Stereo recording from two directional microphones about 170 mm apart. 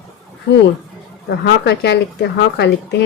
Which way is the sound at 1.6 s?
80° left.